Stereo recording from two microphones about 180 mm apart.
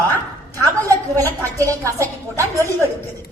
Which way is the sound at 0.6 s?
15° right (ahead or behind).